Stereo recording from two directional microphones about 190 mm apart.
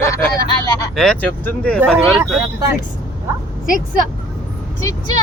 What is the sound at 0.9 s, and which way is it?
Speech, 5° left (ahead or behind).